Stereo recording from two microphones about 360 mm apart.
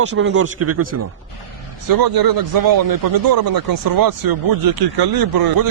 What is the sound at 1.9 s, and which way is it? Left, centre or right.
Speech, right.